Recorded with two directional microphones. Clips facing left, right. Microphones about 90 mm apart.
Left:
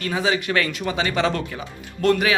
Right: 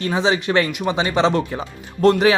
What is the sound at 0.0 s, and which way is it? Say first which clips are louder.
Speech: right 3 dB; 25° right (ahead or behind).